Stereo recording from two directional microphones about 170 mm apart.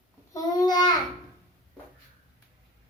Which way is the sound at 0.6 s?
25° left (ahead or behind).